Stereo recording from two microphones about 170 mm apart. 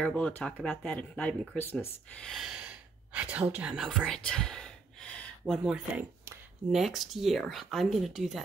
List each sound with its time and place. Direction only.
0.0 s speech: 5° left (ahead or behind)